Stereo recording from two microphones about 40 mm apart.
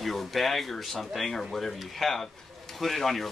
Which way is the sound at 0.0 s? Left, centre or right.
Centre.